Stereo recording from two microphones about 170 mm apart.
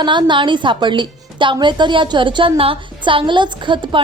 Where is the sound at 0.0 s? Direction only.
25° right (ahead or behind).